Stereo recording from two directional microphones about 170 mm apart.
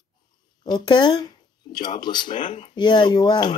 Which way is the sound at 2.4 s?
40° left (ahead or behind).